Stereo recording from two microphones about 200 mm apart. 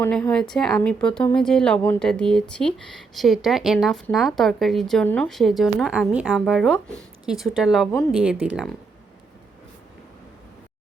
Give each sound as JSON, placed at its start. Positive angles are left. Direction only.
{"t": 0.0, "sound": "a woman's voice", "side_deg": 5}